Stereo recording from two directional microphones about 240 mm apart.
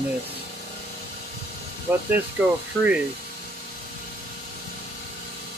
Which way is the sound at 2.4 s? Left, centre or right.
Centre.